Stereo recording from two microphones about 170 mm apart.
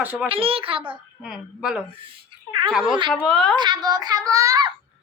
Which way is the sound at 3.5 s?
25° right (ahead or behind).